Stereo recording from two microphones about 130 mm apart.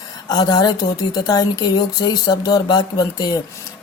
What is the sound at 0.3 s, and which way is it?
A woman's voice, 30° left (ahead or behind).